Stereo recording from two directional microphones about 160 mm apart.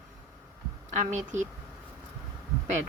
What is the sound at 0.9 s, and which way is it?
Speech, 50° right (ahead or behind).